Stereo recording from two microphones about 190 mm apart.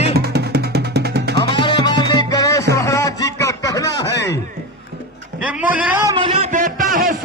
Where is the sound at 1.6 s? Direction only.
25° left (ahead or behind).